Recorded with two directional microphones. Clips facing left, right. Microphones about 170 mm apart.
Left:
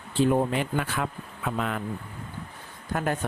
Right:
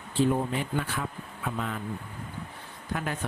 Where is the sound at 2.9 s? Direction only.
45° left (ahead or behind).